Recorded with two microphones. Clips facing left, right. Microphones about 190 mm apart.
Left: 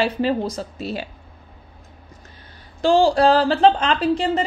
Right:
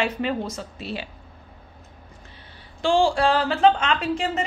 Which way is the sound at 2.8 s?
40° left (ahead or behind).